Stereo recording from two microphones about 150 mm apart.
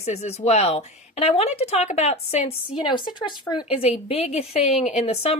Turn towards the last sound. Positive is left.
turn(degrees=45)  # may be behind; listen again after turning